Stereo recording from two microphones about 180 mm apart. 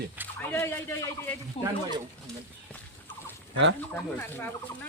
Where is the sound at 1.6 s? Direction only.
35° left (ahead or behind).